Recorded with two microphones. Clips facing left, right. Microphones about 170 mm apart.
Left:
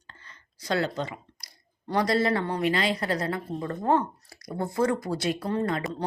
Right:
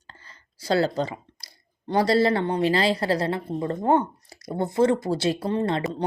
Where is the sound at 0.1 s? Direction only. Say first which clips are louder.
Right 2 dB; 30° right (ahead or behind).